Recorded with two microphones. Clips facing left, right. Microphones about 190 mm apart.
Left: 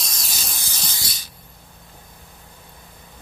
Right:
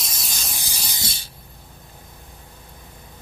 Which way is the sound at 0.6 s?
15° right (ahead or behind).